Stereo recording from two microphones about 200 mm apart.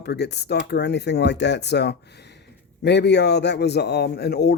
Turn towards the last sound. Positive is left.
turn(degrees=55)  # may be behind; listen again after turning